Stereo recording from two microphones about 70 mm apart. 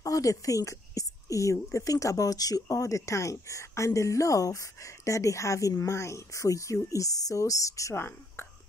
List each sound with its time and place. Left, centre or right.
0.0 s a woman's voice: left
7.9 s speech: left